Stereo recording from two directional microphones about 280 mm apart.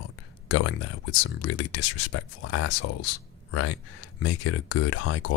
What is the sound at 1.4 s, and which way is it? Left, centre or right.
Speech, left.